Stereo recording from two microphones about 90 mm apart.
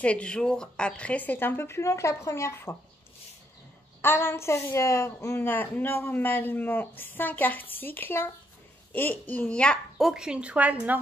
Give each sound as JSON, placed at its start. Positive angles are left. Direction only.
{"t": 0.0, "sound": "a woman's voice", "side_deg": 15}
{"t": 4.0, "sound": "a woman's voice", "side_deg": 25}
{"t": 9.9, "sound": "a woman's voice", "side_deg": -5}